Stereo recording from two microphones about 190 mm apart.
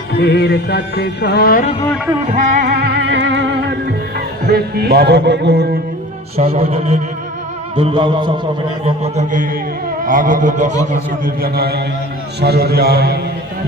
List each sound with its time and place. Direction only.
0.2 s music: 60° left (ahead or behind)
2.3 s music: 50° right (ahead or behind); by 3.8 s 65° right (ahead or behind)
4.4 s a man's voice: 60° right (ahead or behind)
6.5 s music: 30° right (ahead or behind)
9.1 s speech: 45° right (ahead or behind)
11.4 s a man's voice: 55° right (ahead or behind)